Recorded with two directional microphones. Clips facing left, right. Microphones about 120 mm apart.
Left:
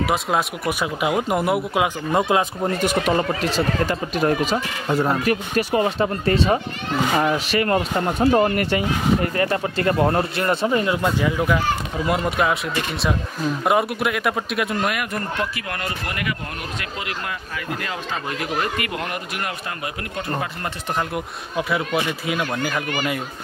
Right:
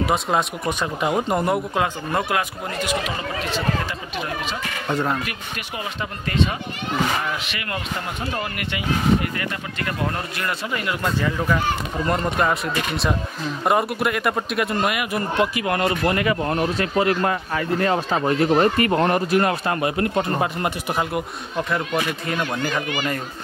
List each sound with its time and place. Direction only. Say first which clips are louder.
0.0 s speech: even; centre (ahead or behind)
2.1 s speech: left 4 dB; 25° left (ahead or behind)
2.8 s speech: left 5 dB; 45° left (ahead or behind)
4.8 s speech: left 2 dB; 5° left (ahead or behind)
5.1 s speech: left 8 dB; 35° left (ahead or behind); by 20.7 s 25° right (ahead or behind)
21.5 s speech: left 1 dB; 5° left (ahead or behind)